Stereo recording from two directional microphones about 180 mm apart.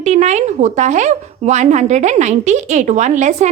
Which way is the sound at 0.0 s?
40° right (ahead or behind).